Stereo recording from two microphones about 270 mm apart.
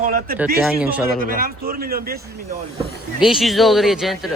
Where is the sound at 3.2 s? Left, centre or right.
Centre.